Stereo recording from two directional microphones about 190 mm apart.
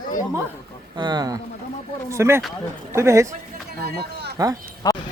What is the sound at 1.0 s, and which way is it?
Speech, 20° right (ahead or behind).